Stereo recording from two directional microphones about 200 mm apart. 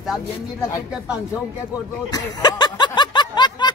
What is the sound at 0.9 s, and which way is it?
Speech, 5° right (ahead or behind).